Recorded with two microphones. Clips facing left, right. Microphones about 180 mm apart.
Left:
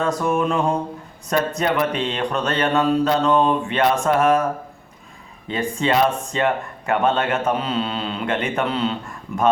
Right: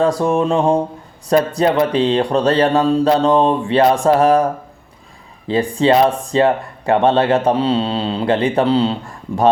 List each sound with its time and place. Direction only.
0.0 s speech: 30° right (ahead or behind)
5.5 s speech: 35° right (ahead or behind)